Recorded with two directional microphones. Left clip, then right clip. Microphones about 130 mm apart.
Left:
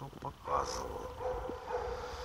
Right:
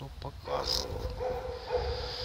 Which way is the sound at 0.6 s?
25° right (ahead or behind).